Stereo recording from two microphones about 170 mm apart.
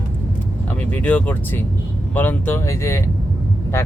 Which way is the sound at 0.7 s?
10° left (ahead or behind).